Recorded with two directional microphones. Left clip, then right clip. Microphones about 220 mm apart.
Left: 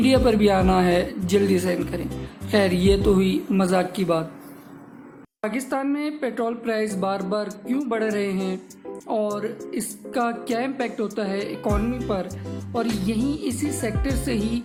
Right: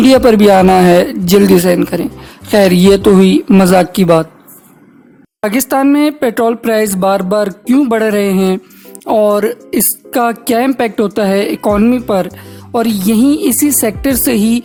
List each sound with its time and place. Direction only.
0.0 s speech: 40° right (ahead or behind)
5.4 s speech: 45° right (ahead or behind)